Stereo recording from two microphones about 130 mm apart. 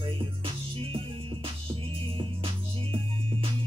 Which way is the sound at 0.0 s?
45° right (ahead or behind).